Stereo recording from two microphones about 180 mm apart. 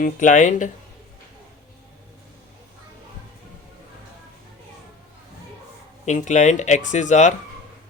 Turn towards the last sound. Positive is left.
turn(degrees=40)  # may be behind; listen again after turning